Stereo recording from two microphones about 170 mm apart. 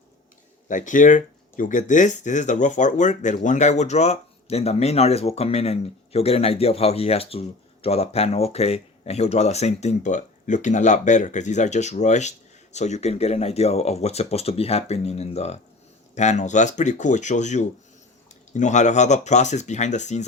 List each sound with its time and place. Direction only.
0.7 s speech: 50° left (ahead or behind)